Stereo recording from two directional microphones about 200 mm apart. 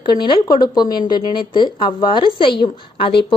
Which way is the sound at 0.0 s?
20° left (ahead or behind).